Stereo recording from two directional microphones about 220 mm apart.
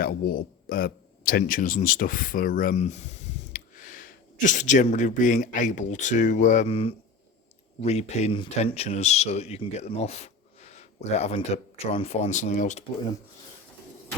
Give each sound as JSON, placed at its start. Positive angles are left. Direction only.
{"t": 0.0, "sound": "speech", "side_deg": 40}